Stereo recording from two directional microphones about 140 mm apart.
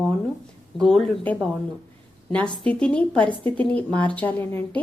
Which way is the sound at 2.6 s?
5° left (ahead or behind).